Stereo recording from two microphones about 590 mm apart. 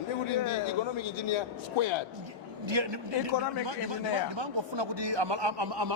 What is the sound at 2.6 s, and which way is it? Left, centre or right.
Speech, right.